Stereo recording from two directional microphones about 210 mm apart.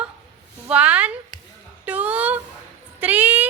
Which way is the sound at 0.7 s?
5° right (ahead or behind).